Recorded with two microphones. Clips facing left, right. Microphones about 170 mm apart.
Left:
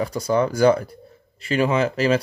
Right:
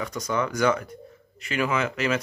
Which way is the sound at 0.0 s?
35° left (ahead or behind).